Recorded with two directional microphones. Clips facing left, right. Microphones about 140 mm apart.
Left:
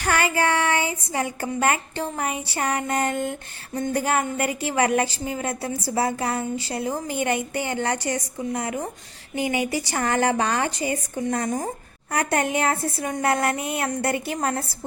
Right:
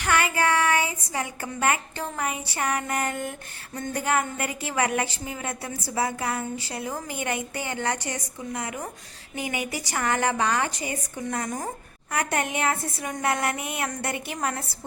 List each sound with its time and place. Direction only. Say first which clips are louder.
0.0 s a woman's voice: left 2 dB; 35° left (ahead or behind)